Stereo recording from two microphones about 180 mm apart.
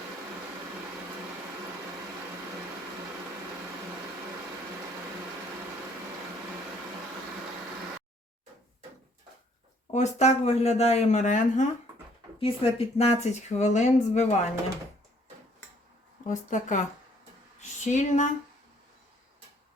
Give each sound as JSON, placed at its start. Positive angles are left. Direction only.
{"t": 9.9, "sound": "speech", "side_deg": 40}
{"t": 12.4, "sound": "speech", "side_deg": 30}
{"t": 16.2, "sound": "speech", "side_deg": 45}